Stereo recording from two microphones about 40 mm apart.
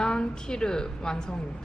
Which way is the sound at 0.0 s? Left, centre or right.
Left.